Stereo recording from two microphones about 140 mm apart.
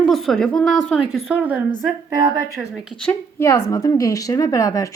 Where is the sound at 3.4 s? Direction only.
20° left (ahead or behind).